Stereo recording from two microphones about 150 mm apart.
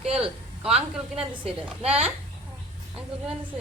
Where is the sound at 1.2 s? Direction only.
40° right (ahead or behind).